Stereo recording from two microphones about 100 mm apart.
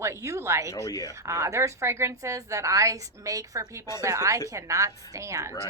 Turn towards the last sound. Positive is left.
turn(degrees=-30)  # may be behind; listen again after turning